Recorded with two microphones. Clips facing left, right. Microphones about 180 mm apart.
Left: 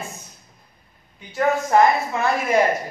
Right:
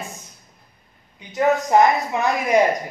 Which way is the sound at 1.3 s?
20° right (ahead or behind).